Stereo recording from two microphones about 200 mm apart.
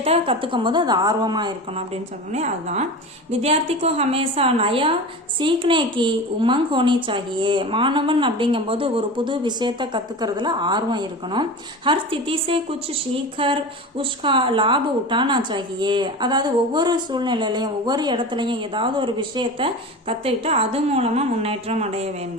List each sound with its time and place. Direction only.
0.0 s a woman's voice: 30° right (ahead or behind)
2.3 s a woman's voice: 35° right (ahead or behind)